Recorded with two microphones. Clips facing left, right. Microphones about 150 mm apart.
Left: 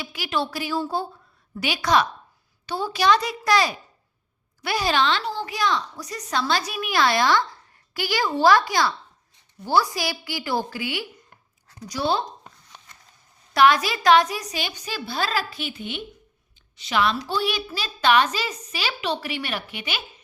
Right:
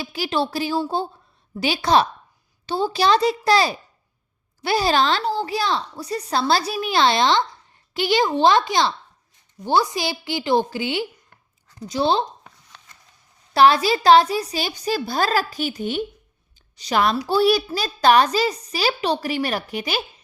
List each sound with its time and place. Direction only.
0.0 s a woman's voice: 30° right (ahead or behind)
13.5 s a woman's voice: 30° right (ahead or behind)